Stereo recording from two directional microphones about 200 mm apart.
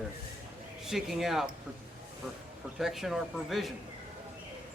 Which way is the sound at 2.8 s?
Centre (ahead or behind).